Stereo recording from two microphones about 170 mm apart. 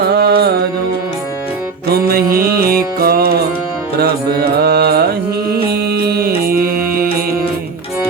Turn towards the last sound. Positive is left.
turn(degrees=-60)  # may be behind; listen again after turning